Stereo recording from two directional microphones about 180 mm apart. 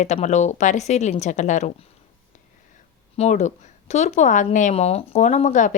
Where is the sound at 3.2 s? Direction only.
40° left (ahead or behind).